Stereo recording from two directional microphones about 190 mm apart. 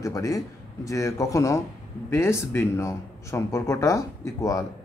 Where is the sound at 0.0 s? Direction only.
20° left (ahead or behind).